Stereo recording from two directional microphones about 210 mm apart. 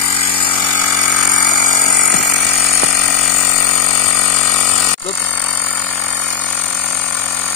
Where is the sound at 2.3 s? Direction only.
5° left (ahead or behind).